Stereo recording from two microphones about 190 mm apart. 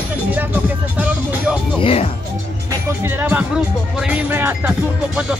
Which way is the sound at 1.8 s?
30° left (ahead or behind).